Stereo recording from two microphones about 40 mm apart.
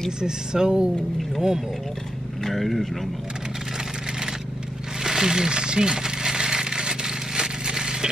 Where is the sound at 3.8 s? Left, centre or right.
Centre.